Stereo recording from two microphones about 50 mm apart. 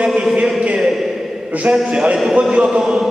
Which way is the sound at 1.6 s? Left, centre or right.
Right.